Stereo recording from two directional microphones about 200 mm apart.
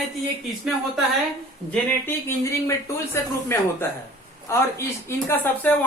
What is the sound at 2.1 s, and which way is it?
Speech, 15° left (ahead or behind).